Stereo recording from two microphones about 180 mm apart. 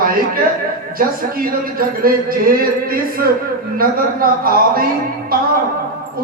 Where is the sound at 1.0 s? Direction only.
55° right (ahead or behind).